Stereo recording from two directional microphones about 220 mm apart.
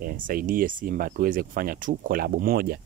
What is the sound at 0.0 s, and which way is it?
Speech, 40° right (ahead or behind).